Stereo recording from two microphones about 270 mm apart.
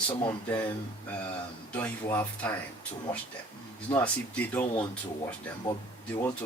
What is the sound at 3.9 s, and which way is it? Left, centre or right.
Speech, centre.